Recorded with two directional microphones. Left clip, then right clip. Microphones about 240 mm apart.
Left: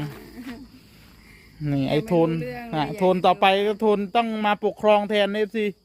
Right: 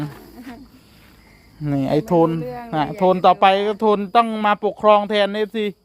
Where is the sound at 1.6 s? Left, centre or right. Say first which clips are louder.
Right 4 dB; centre.